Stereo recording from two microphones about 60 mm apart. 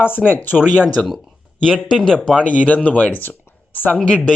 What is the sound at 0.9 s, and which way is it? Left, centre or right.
Speech, centre.